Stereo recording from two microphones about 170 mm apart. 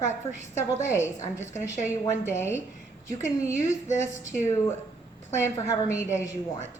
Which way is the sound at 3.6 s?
20° left (ahead or behind).